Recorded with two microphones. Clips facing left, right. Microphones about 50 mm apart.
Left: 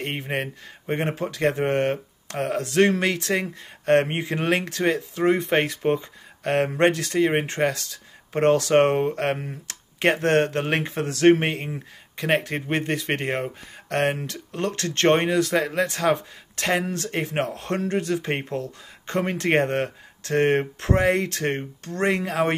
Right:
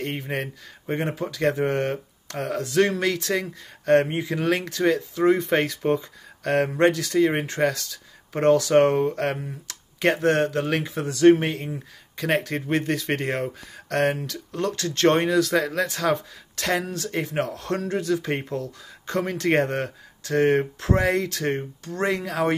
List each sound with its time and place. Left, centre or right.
0.0 s speech: left
11.1 s speech: left